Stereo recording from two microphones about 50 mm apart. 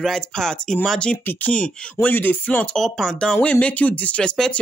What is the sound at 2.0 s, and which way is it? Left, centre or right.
Speech, left.